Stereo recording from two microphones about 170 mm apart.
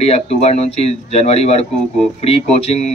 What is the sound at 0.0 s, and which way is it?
Speech, 40° left (ahead or behind).